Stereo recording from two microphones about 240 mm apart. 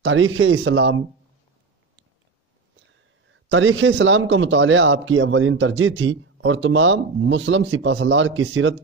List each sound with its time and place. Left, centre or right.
0.0 s a man's voice: right
3.4 s a man's voice: right